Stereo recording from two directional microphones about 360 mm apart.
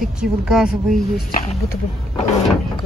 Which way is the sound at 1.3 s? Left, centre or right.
Left.